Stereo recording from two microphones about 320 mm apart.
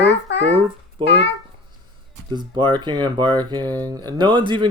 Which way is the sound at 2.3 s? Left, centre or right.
Centre.